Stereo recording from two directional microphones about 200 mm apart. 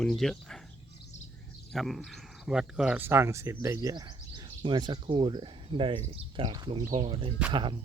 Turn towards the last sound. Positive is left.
turn(degrees=-25)  # may be behind; listen again after turning